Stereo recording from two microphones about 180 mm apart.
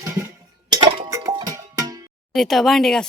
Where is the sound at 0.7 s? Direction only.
25° right (ahead or behind).